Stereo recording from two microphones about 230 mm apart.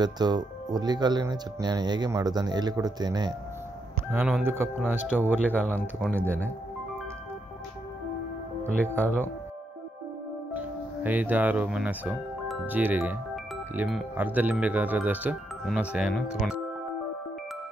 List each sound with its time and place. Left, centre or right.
0.0 s speech: centre
4.1 s speech: centre
5.5 s speech: centre
6.1 s speech: centre
8.7 s speech: centre
10.5 s speech: centre